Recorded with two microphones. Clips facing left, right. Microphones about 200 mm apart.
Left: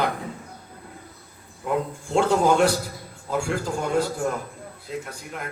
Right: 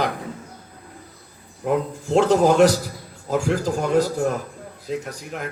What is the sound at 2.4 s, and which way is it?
A man's voice, 40° right (ahead or behind).